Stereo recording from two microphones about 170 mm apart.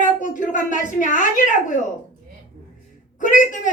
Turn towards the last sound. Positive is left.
turn(degrees=50)  # may be behind; listen again after turning